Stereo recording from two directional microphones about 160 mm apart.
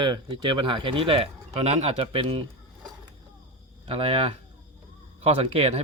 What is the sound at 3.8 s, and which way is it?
Speech, 40° right (ahead or behind).